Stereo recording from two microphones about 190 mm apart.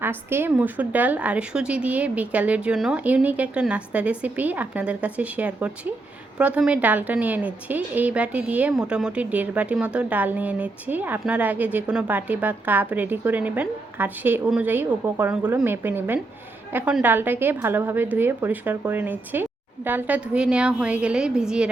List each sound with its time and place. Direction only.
0.0 s a woman's voice: 10° right (ahead or behind)